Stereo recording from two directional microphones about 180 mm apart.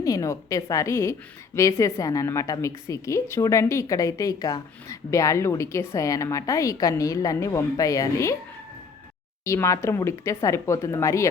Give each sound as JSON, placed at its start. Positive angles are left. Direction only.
{"t": 0.0, "sound": "a woman's voice", "side_deg": 20}
{"t": 9.4, "sound": "a woman's voice", "side_deg": 15}